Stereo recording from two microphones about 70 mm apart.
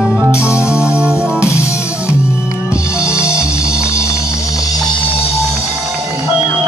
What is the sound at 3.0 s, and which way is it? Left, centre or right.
Music, centre.